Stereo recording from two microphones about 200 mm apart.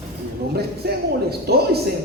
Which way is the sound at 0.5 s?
55° right (ahead or behind).